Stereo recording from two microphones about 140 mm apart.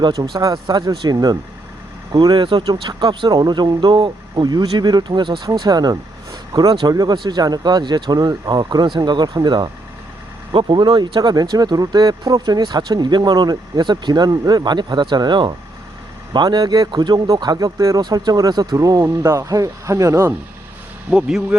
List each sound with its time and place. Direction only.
0.0 s speech: 25° right (ahead or behind)
21.1 s speech: 5° right (ahead or behind)